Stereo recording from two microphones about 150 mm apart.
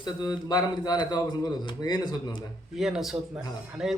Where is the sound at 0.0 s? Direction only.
30° left (ahead or behind).